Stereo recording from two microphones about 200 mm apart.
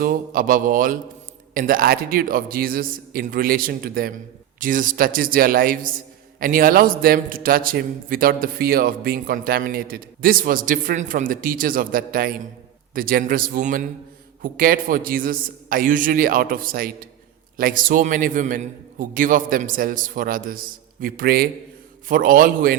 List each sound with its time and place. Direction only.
0.0 s a man's voice: 45° right (ahead or behind)